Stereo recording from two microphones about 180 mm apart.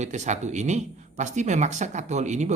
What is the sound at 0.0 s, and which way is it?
A man's voice, 40° right (ahead or behind).